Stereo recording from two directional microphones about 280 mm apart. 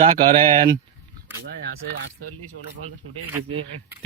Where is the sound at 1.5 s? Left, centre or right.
Right.